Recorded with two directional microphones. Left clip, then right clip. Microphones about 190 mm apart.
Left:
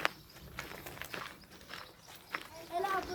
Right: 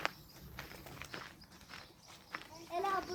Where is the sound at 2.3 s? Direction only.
35° left (ahead or behind).